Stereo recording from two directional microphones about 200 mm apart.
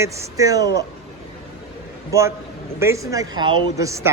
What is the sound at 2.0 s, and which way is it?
Speech, 15° right (ahead or behind).